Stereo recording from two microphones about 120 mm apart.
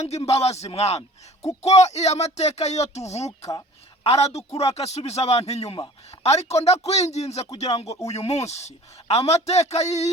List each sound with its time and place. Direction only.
0.3 s a man's voice: 60° left (ahead or behind)